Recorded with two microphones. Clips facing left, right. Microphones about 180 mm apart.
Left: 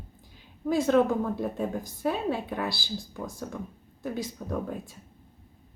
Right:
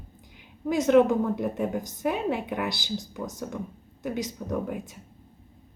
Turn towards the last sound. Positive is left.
turn(degrees=-20)  # may be behind; listen again after turning